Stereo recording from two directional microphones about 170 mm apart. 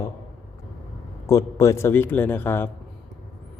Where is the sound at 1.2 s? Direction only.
20° left (ahead or behind).